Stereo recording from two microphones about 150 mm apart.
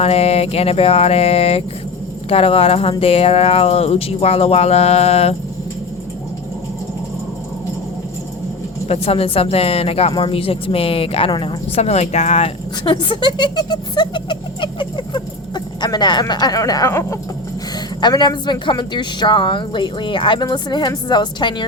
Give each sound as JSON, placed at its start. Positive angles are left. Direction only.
{"t": 0.0, "sound": "a woman's voice", "side_deg": 40}
{"t": 8.9, "sound": "a woman's voice", "side_deg": 40}